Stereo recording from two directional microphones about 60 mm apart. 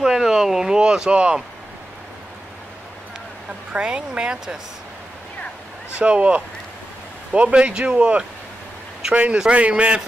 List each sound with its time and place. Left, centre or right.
0.0 s speech: centre
3.7 s speech: centre
5.9 s speech: right